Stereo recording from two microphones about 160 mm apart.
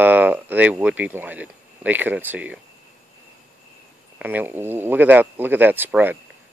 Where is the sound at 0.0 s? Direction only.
10° right (ahead or behind).